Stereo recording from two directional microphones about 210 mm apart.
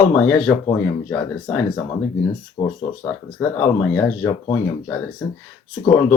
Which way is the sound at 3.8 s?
5° left (ahead or behind).